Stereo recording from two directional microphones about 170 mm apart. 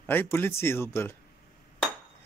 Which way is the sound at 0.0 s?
10° left (ahead or behind).